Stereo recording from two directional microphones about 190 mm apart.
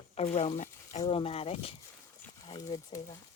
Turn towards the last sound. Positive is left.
turn(degrees=20)  # may be behind; listen again after turning